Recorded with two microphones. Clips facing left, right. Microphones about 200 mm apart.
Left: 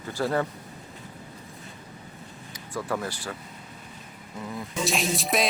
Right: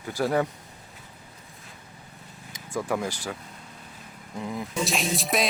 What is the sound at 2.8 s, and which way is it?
Speech, 10° right (ahead or behind).